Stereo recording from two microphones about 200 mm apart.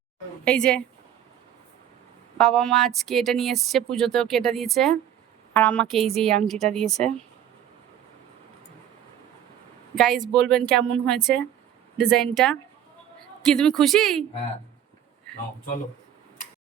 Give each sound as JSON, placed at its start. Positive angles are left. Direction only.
{"t": 0.4, "sound": "speech", "side_deg": 5}
{"t": 2.4, "sound": "speech", "side_deg": 5}
{"t": 9.9, "sound": "speech", "side_deg": 0}